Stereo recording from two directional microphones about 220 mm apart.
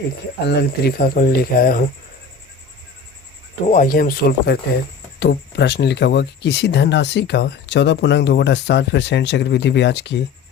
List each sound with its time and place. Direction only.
0.4 s speech: 50° left (ahead or behind)
3.7 s speech: 40° left (ahead or behind)